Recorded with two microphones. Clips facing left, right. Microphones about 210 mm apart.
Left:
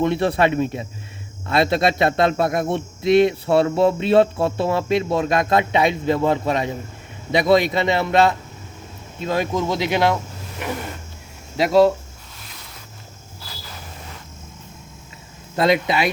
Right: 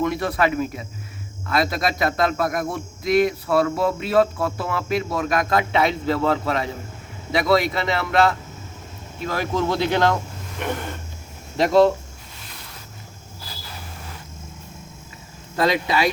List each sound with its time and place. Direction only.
0.0 s a man's voice: 30° left (ahead or behind); by 10.2 s 10° left (ahead or behind)
11.5 s speech: 5° left (ahead or behind)
15.5 s a man's voice: 25° left (ahead or behind)